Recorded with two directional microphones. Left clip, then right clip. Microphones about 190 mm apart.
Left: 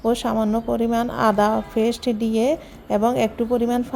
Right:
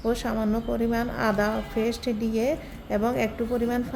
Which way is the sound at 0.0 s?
25° left (ahead or behind).